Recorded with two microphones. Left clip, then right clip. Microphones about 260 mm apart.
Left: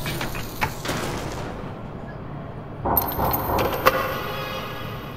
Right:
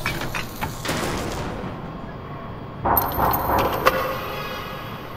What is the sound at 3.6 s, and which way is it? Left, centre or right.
Vehicle, centre.